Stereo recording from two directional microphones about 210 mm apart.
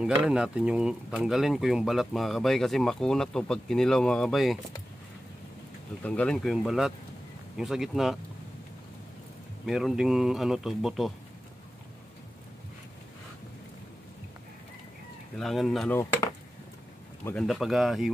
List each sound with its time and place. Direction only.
0.2 s speech: 5° right (ahead or behind)
6.0 s speech: 5° left (ahead or behind)
9.7 s speech: centre (ahead or behind)
15.3 s speech: centre (ahead or behind)
16.0 s speech: 15° left (ahead or behind); by 18.1 s centre (ahead or behind)